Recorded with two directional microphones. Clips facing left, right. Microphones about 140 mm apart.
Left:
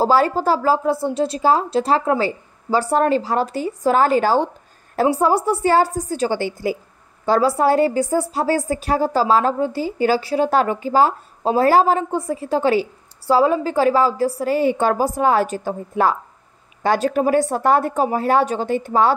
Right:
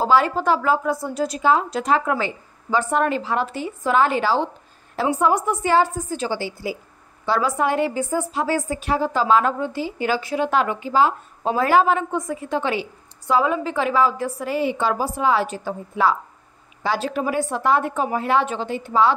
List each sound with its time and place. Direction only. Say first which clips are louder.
0.0 s a woman's voice: left 2 dB; 35° left (ahead or behind)
7.2 s a woman's voice: left 5 dB; 35° left (ahead or behind)